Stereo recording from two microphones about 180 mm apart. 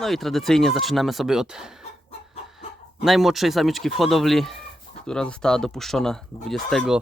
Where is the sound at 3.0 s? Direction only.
Centre (ahead or behind).